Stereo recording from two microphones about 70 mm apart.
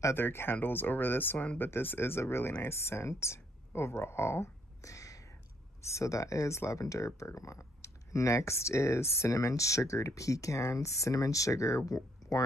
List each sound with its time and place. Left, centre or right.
0.0 s speech: left